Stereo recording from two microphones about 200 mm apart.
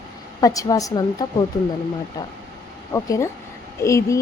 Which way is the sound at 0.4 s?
15° left (ahead or behind).